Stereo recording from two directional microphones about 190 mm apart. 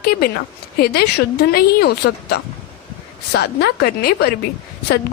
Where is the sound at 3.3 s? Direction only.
60° left (ahead or behind).